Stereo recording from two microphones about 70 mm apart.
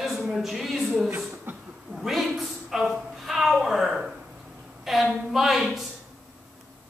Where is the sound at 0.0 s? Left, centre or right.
Centre.